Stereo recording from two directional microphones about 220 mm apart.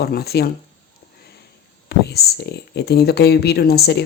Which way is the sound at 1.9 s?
45° left (ahead or behind).